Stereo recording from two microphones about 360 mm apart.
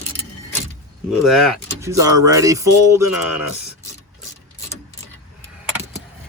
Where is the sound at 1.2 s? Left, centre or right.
Centre.